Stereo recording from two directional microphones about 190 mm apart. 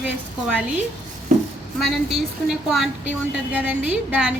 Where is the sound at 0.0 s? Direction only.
5° right (ahead or behind).